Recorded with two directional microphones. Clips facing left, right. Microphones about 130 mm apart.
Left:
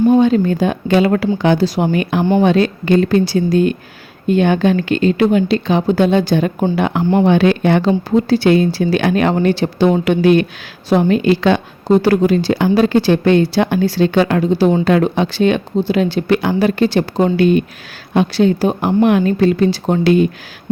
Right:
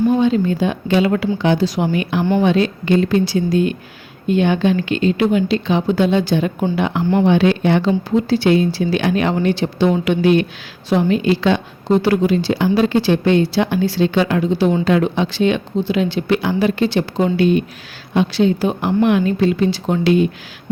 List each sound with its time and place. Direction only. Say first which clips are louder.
0.2 s a woman's voice: left 3 dB; 50° left (ahead or behind)
1.9 s a woman's voice: left 3 dB; 50° left (ahead or behind)